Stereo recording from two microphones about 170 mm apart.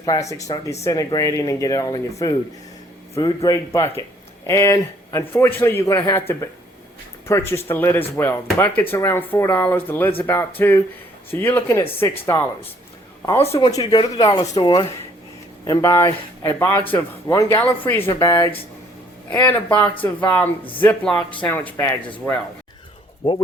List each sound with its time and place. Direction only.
0.0 s speech: 20° left (ahead or behind)
13.4 s speech: 35° left (ahead or behind)
13.7 s speech: 25° left (ahead or behind)
18.1 s speech: 25° left (ahead or behind)
19.3 s speech: 10° left (ahead or behind)
23.2 s speech: 30° left (ahead or behind)